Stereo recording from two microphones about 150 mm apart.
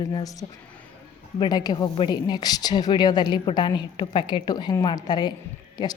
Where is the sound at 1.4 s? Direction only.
30° left (ahead or behind).